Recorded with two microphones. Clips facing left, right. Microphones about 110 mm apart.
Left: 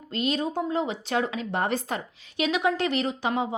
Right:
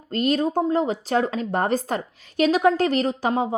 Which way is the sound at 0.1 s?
45° right (ahead or behind).